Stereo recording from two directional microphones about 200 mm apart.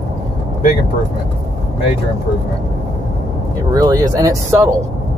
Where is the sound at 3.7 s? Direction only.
20° right (ahead or behind).